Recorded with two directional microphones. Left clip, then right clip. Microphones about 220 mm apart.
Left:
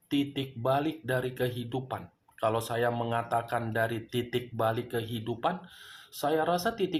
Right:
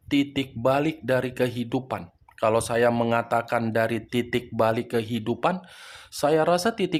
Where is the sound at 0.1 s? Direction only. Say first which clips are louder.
Right 6 dB; 45° right (ahead or behind).